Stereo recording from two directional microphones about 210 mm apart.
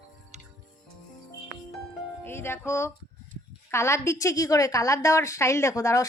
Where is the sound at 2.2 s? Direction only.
10° left (ahead or behind).